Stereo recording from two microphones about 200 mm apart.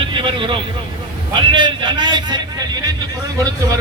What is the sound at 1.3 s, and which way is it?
A man's voice, 25° right (ahead or behind).